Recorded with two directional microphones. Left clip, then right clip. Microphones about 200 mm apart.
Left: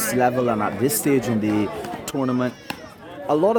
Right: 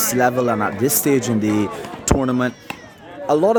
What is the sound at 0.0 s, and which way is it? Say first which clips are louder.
Speech: right 2 dB; 25° right (ahead or behind).